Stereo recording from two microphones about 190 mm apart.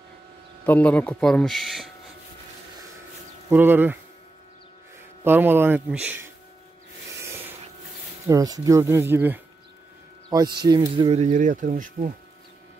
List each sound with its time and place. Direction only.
0.7 s speech: 10° left (ahead or behind)
3.4 s speech: 10° right (ahead or behind)
5.2 s speech: 10° right (ahead or behind)
8.3 s speech: 20° right (ahead or behind)
10.3 s speech: 20° right (ahead or behind)
11.0 s speech: 35° right (ahead or behind)